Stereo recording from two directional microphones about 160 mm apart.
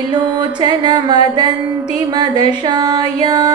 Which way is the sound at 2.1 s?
25° right (ahead or behind).